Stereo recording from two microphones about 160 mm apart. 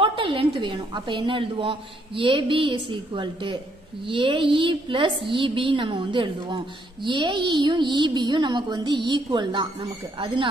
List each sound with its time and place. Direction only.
0.0 s a woman's voice: 35° right (ahead or behind)